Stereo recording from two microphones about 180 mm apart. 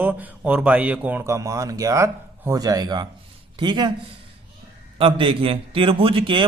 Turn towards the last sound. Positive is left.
turn(degrees=-30)  # may be behind; listen again after turning